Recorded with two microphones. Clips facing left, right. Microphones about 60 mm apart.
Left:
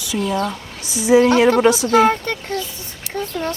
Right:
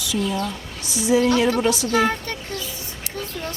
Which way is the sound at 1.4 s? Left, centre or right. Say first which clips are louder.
Left 6 dB; left.